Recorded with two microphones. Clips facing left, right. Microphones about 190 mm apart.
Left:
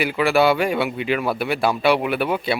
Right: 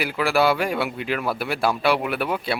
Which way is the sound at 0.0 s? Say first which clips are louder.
Left 3 dB; centre (ahead or behind).